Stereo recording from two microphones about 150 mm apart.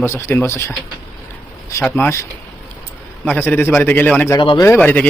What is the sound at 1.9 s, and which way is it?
Speech, 15° left (ahead or behind).